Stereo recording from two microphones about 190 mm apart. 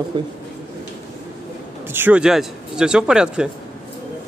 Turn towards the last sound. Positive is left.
turn(degrees=-5)  # may be behind; listen again after turning